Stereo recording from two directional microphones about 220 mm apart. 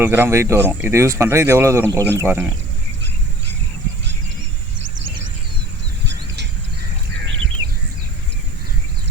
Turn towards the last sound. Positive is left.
turn(degrees=-55)  # may be behind; listen again after turning